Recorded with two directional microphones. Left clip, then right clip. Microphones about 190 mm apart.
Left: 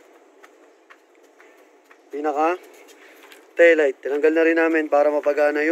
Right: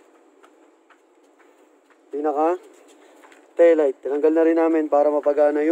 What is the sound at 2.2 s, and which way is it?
Speech, 10° right (ahead or behind).